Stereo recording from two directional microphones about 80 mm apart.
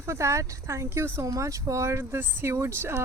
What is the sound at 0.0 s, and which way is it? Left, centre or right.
Speech, right.